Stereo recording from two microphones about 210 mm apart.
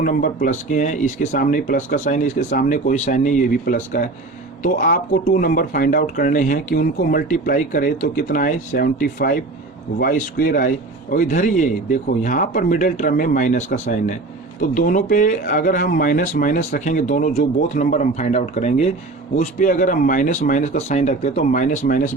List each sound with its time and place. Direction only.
0.0 s speech: 40° left (ahead or behind)